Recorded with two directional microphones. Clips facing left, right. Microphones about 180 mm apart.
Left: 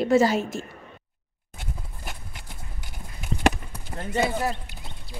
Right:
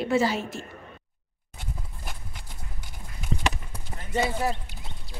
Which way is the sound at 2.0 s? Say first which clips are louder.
Left 2 dB; 5° left (ahead or behind).